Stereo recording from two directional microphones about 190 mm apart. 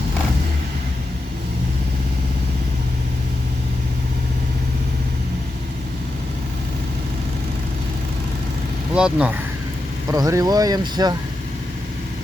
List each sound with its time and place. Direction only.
9.0 s speech: 5° right (ahead or behind)
10.1 s speech: 20° right (ahead or behind)